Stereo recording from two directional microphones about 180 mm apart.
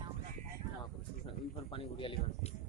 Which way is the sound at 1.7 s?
30° left (ahead or behind).